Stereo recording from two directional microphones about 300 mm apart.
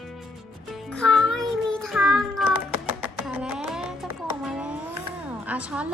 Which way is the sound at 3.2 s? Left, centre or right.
Centre.